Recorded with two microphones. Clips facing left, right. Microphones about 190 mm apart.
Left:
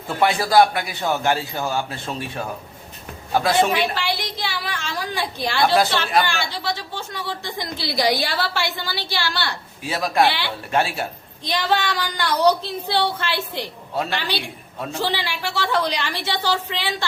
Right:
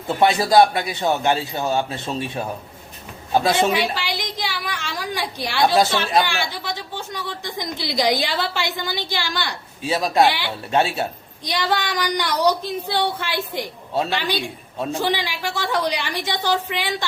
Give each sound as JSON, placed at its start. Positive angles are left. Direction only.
{"t": 0.2, "sound": "a man's voice", "side_deg": -20}
{"t": 3.9, "sound": "a woman's voice", "side_deg": -15}
{"t": 11.4, "sound": "a woman's voice", "side_deg": -10}